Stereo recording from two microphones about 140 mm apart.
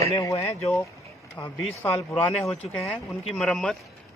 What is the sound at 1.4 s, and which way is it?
Speech, 30° left (ahead or behind).